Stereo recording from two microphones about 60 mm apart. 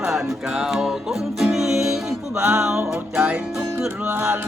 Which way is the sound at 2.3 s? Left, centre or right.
Centre.